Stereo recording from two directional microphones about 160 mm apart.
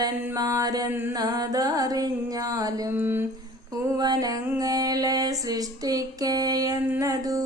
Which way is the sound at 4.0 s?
25° right (ahead or behind).